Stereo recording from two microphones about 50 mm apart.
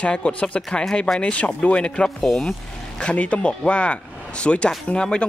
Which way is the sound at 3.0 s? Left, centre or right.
Left.